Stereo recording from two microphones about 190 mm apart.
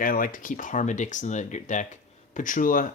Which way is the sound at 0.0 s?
45° left (ahead or behind).